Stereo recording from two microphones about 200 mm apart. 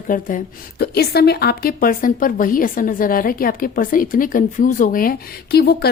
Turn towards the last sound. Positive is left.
turn(degrees=55)  # may be behind; listen again after turning